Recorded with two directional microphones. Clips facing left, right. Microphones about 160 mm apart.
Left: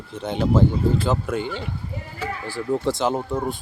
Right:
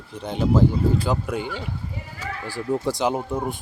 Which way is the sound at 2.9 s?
15° right (ahead or behind).